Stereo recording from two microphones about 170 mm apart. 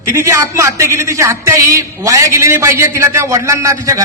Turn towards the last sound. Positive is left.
turn(degrees=-20)  # may be behind; listen again after turning